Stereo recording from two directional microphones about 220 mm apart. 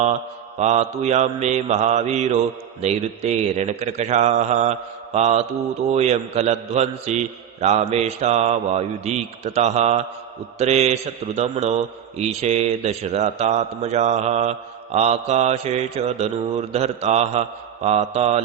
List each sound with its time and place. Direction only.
0.6 s a man's voice: 30° right (ahead or behind)